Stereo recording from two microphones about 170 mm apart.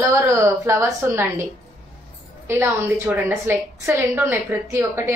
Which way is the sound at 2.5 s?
15° right (ahead or behind).